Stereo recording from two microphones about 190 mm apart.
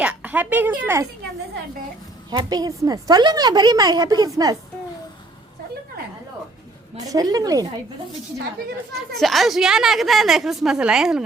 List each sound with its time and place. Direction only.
0.0 s speech: 5° right (ahead or behind)
2.3 s a woman's voice: 20° right (ahead or behind)
6.9 s a woman's voice: 20° right (ahead or behind)
9.0 s a woman's voice: centre (ahead or behind)